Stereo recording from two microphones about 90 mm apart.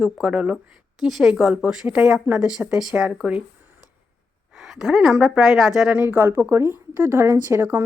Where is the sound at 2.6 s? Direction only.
10° right (ahead or behind).